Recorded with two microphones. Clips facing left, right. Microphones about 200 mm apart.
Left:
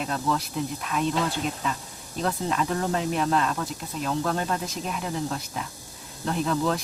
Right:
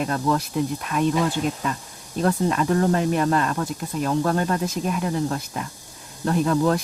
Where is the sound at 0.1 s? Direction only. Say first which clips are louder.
Right 4 dB; 50° right (ahead or behind).